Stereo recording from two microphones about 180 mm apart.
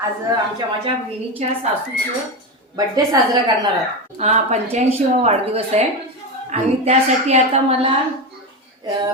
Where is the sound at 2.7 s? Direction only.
20° right (ahead or behind).